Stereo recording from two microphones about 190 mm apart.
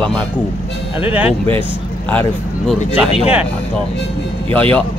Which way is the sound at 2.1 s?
10° left (ahead or behind).